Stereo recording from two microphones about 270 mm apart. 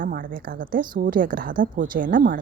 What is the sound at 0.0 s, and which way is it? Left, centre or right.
A woman's voice, right.